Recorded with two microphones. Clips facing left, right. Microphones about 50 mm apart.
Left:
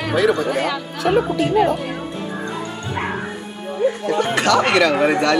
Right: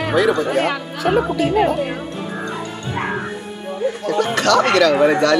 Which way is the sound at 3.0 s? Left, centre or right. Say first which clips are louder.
Right 1 dB; centre.